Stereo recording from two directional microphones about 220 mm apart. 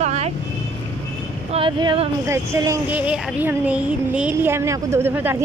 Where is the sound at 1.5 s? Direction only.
25° right (ahead or behind).